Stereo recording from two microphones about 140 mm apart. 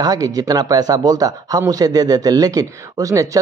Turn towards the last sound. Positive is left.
turn(degrees=-25)  # may be behind; listen again after turning